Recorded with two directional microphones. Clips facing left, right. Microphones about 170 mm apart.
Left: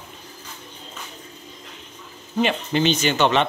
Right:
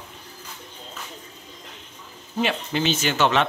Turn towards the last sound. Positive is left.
turn(degrees=-5)  # may be behind; listen again after turning